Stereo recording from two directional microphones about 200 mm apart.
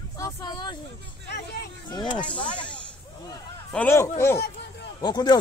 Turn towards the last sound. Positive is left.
turn(degrees=20)  # may be behind; listen again after turning